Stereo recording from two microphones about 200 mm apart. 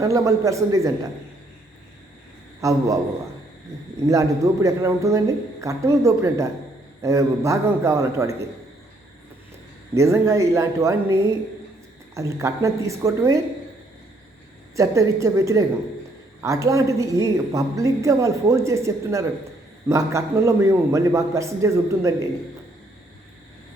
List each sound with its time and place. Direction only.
0.0 s a woman's voice: 15° right (ahead or behind)
2.6 s a woman's voice: 15° right (ahead or behind)
4.0 s a woman's voice: 15° right (ahead or behind)
9.9 s a woman's voice: 15° right (ahead or behind)
14.8 s a woman's voice: 15° right (ahead or behind)